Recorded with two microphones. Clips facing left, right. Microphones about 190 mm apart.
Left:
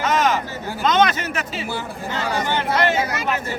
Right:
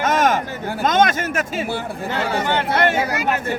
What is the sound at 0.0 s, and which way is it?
A man's voice, 50° right (ahead or behind).